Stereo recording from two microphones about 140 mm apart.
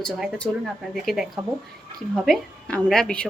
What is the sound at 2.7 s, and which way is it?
Speech, 5° left (ahead or behind).